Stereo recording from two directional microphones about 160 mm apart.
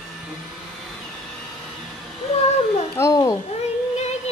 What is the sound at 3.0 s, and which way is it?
Speech, 25° left (ahead or behind).